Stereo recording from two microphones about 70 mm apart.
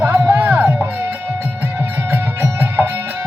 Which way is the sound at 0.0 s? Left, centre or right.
Right.